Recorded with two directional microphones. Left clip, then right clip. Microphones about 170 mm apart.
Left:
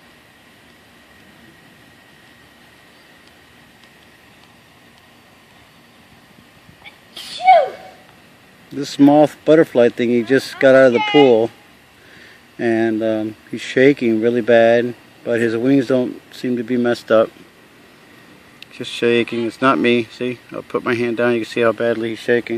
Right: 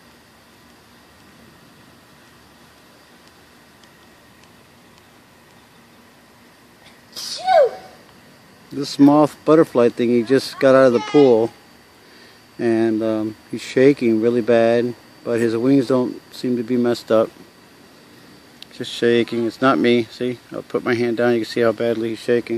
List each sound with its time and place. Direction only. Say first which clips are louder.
7.2 s a sound: left 4 dB; 75° right (ahead or behind)
8.9 s speech: left 2 dB; 5° left (ahead or behind)
12.5 s speech: left 1 dB; 10° left (ahead or behind)
18.6 s speech: left 1 dB; centre (ahead or behind)